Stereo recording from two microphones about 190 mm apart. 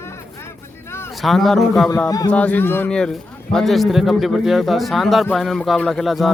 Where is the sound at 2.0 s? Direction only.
20° left (ahead or behind).